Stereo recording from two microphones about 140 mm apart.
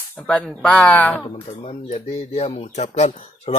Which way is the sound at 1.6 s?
50° left (ahead or behind).